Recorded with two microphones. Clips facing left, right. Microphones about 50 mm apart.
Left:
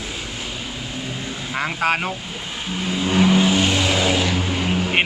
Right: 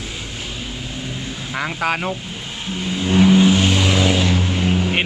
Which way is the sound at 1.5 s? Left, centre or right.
Left.